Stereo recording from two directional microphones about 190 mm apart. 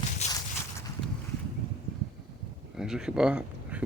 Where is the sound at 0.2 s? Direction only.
35° left (ahead or behind).